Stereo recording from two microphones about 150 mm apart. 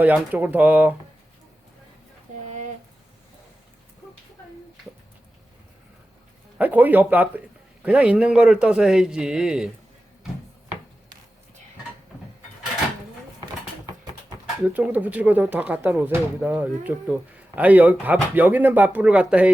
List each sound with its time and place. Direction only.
0.0 s speech: 10° right (ahead or behind)
2.3 s a sound: 55° right (ahead or behind)
6.6 s speech: 10° right (ahead or behind)
14.7 s speech: 10° right (ahead or behind)